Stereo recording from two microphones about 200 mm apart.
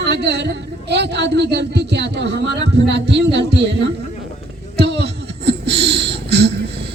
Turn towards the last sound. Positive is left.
turn(degrees=-55)  # may be behind; listen again after turning